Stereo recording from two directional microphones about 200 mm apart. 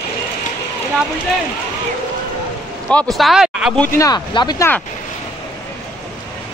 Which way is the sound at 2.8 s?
5° left (ahead or behind).